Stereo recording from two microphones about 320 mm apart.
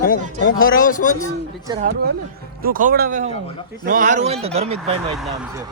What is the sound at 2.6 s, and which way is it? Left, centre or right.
Speech, right.